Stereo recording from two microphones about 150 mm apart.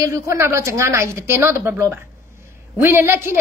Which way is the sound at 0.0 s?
20° right (ahead or behind).